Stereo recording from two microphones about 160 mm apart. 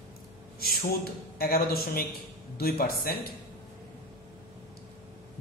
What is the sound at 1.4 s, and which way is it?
A man's voice, 70° left (ahead or behind).